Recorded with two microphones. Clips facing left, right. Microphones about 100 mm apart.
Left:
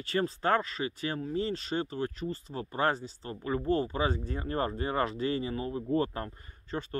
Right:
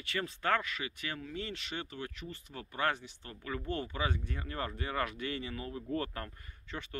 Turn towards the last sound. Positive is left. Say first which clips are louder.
# left 7 dB
turn(degrees=40)  # may be behind; listen again after turning